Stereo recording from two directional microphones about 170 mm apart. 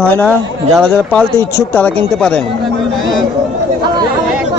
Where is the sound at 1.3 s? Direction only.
15° left (ahead or behind).